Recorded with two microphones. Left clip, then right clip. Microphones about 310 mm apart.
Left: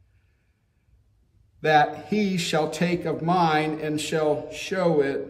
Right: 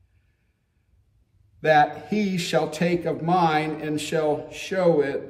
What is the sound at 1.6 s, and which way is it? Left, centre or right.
A man's voice, centre.